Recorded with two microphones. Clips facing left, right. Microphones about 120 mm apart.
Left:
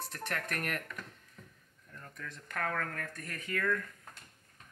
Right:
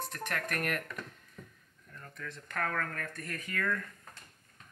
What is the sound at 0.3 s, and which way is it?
Speech, 10° right (ahead or behind).